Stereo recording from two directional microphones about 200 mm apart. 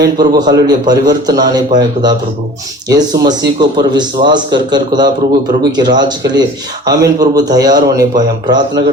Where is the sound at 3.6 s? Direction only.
20° right (ahead or behind).